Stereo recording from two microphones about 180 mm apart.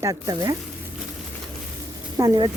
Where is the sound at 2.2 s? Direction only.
25° right (ahead or behind).